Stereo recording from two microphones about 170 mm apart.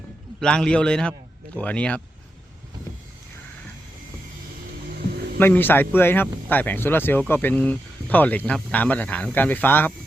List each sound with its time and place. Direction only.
0.3 s a man's voice: 5° left (ahead or behind)
4.9 s music: 70° right (ahead or behind)
5.4 s speech: 10° left (ahead or behind)